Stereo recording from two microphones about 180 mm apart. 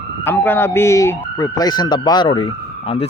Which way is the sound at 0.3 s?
10° left (ahead or behind).